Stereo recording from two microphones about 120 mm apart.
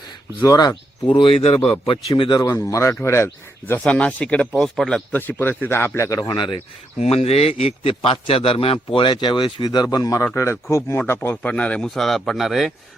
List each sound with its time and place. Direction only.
0.4 s a man's voice: 30° left (ahead or behind)
2.4 s speech: 25° left (ahead or behind)
3.8 s a man's voice: 10° left (ahead or behind)
5.1 s a man's voice: 15° left (ahead or behind)
6.1 s speech: 35° left (ahead or behind)
7.0 s a man's voice: 60° left (ahead or behind); by 12.7 s centre (ahead or behind)